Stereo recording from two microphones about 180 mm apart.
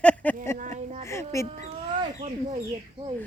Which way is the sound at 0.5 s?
40° right (ahead or behind).